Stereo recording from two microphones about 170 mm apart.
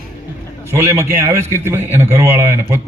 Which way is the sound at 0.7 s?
15° right (ahead or behind).